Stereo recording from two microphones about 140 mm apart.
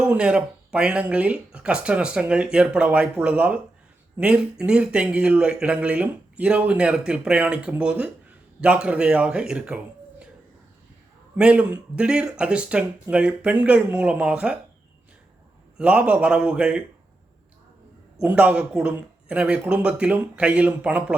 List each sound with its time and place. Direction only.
0.0 s speech: 10° right (ahead or behind)
11.3 s speech: 10° right (ahead or behind)
15.8 s speech: 10° right (ahead or behind)
18.2 s speech: 10° right (ahead or behind)